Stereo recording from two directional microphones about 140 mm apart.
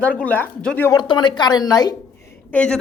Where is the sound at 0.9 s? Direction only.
30° left (ahead or behind).